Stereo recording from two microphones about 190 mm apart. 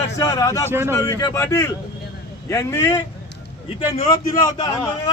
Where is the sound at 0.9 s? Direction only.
15° left (ahead or behind).